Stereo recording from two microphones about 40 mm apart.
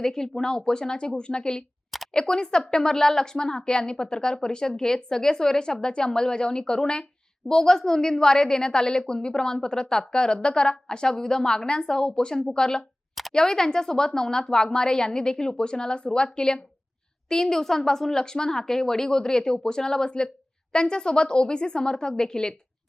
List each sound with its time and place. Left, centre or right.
0.0 s a woman's voice: centre